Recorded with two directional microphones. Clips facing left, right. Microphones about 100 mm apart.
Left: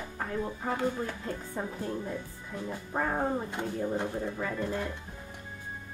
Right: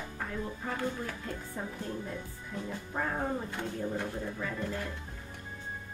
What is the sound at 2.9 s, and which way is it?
Speech, 35° left (ahead or behind).